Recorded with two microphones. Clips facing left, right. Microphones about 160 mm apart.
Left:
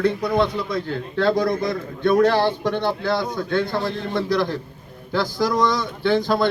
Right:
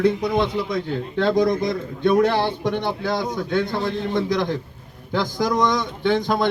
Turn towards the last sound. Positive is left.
turn(degrees=-20)  # may be behind; listen again after turning